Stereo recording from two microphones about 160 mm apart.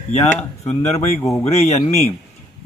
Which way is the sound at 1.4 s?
40° left (ahead or behind).